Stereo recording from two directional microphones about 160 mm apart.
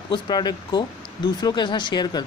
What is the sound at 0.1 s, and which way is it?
Speech, 25° left (ahead or behind).